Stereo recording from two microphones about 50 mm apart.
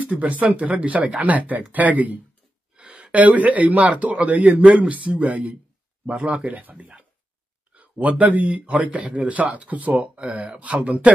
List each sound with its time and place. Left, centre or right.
0.0 s speech: right
6.8 s speech: centre
7.7 s speech: right